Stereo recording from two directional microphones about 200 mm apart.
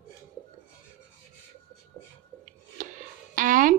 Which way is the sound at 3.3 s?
40° right (ahead or behind).